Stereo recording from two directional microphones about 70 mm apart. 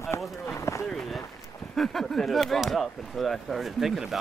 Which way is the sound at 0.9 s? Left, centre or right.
Centre.